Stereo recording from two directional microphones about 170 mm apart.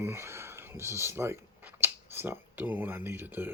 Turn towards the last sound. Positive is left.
turn(degrees=-10)  # may be behind; listen again after turning